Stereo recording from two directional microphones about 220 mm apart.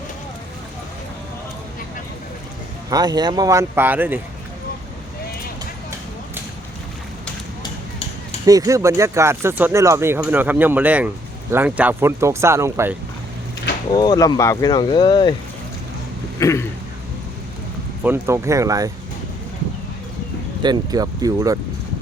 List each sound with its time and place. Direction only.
2.9 s speech: 20° right (ahead or behind)
8.4 s speech: 15° right (ahead or behind)
13.9 s speech: 20° left (ahead or behind)
16.4 s a sound: 15° left (ahead or behind)
18.0 s speech: 10° right (ahead or behind)
20.6 s speech: 20° right (ahead or behind)